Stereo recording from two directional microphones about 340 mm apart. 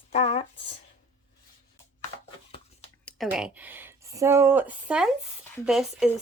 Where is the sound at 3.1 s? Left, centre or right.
Centre.